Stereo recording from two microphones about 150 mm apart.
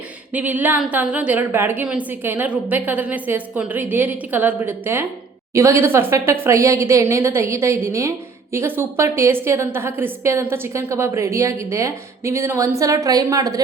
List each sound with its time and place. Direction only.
0.3 s a woman's voice: 10° right (ahead or behind)